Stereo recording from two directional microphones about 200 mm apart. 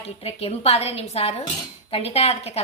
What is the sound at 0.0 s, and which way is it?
A woman's voice, 30° left (ahead or behind).